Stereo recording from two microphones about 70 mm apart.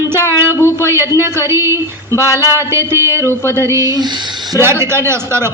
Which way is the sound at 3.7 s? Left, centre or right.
Right.